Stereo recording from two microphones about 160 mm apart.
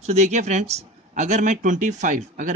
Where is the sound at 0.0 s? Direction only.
45° right (ahead or behind).